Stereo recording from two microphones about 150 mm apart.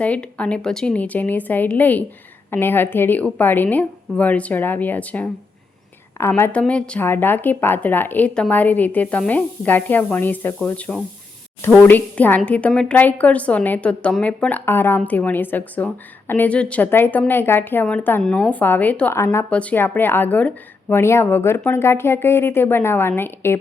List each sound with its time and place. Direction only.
0.0 s a woman's voice: 10° left (ahead or behind)